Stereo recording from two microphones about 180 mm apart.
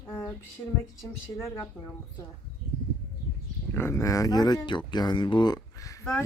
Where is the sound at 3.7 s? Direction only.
15° left (ahead or behind).